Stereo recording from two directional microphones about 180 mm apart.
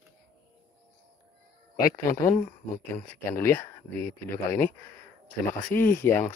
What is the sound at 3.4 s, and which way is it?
Speech, 15° left (ahead or behind).